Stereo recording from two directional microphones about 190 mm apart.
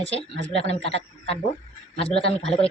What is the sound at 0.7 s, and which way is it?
Speech, 30° left (ahead or behind).